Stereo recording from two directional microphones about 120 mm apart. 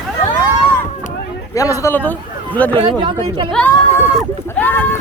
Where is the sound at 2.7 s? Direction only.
45° right (ahead or behind).